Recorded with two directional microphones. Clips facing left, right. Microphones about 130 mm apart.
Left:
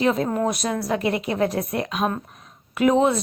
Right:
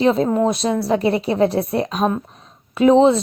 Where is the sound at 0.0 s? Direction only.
30° right (ahead or behind).